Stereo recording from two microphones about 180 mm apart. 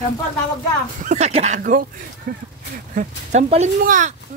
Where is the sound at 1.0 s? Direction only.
40° right (ahead or behind).